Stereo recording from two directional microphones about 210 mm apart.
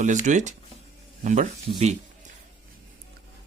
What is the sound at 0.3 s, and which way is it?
Speech, 35° right (ahead or behind).